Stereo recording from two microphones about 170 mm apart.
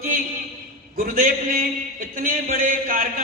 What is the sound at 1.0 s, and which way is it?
A man's voice, 60° right (ahead or behind).